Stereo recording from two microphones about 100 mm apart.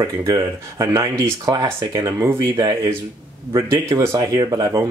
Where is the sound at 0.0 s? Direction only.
30° right (ahead or behind).